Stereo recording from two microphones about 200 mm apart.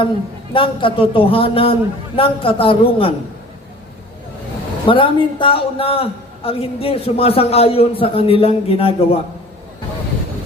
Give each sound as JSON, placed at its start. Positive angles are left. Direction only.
{"t": 0.5, "sound": "a man's voice", "side_deg": 25}
{"t": 4.9, "sound": "a man's voice", "side_deg": 25}